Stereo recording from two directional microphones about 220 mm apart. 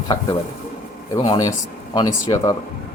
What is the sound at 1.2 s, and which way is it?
Speech, 20° left (ahead or behind).